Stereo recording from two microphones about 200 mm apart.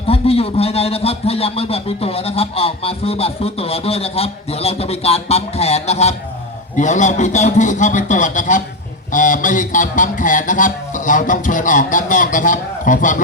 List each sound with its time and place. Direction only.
0.1 s a man's voice: 30° left (ahead or behind)
6.7 s music: 35° left (ahead or behind)